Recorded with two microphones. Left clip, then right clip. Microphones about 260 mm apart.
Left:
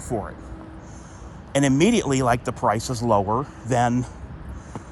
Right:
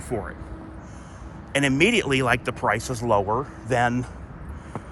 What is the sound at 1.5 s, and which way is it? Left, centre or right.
A man's voice, left.